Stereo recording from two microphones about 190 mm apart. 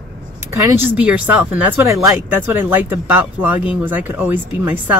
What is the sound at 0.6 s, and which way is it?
Speech, 10° right (ahead or behind).